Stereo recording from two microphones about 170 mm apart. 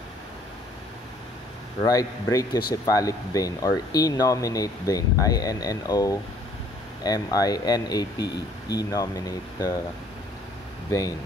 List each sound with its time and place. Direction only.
1.8 s speech: 20° left (ahead or behind)
8.2 s speech: 80° left
8.7 s speech: 20° left (ahead or behind)
10.9 s speech: 20° left (ahead or behind)